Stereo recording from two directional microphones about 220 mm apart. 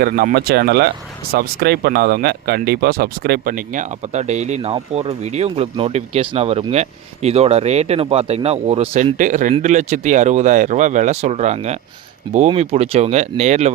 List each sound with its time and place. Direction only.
0.0 s speech: 45° right (ahead or behind)